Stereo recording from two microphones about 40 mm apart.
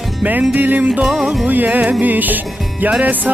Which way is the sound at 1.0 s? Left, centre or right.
Centre.